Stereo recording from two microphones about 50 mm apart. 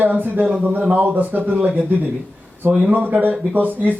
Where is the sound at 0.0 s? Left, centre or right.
Right.